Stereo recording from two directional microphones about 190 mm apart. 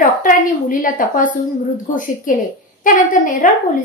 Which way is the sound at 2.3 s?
45° left (ahead or behind).